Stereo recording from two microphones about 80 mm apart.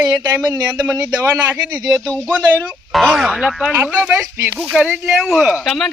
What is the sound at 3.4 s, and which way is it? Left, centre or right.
Speech, centre.